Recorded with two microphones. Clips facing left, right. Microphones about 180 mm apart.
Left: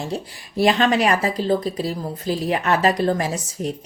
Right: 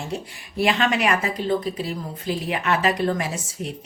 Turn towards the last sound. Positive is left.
turn(degrees=40)  # may be behind; listen again after turning